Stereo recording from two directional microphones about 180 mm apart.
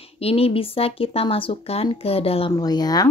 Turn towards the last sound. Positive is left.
turn(degrees=20)  # may be behind; listen again after turning